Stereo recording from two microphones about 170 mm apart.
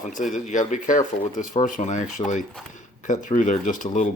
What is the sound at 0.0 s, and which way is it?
Speech, 50° left (ahead or behind).